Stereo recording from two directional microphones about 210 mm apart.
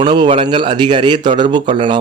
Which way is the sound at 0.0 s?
20° right (ahead or behind).